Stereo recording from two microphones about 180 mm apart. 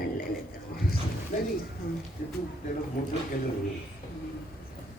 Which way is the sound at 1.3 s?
45° left (ahead or behind).